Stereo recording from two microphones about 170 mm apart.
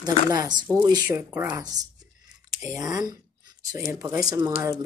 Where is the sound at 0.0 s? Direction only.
25° right (ahead or behind).